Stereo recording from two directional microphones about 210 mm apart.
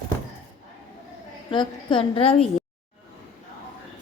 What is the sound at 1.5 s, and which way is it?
Speech, 25° left (ahead or behind).